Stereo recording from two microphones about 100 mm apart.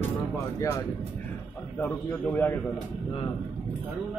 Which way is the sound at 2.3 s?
25° left (ahead or behind).